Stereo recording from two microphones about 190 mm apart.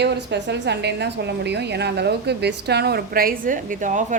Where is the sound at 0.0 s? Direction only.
65° right (ahead or behind).